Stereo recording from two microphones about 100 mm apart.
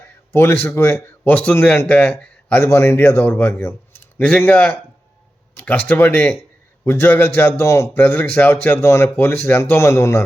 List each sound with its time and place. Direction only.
0.3 s speech: 20° left (ahead or behind)
2.6 s speech: 25° left (ahead or behind)